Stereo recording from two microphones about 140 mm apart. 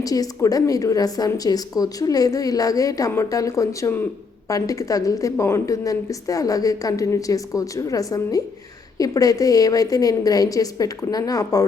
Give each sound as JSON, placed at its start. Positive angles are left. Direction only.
{"t": 0.0, "sound": "speech", "side_deg": 25}